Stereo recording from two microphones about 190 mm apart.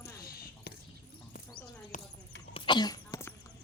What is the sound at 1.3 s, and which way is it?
Horse, 45° left (ahead or behind).